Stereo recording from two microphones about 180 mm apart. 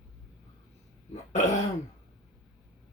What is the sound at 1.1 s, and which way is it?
Throat clearing, 40° left (ahead or behind).